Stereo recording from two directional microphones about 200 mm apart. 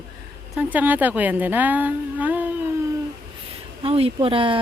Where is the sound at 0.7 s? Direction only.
10° right (ahead or behind).